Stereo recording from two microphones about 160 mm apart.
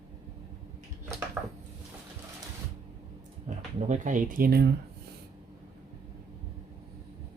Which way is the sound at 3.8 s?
50° right (ahead or behind).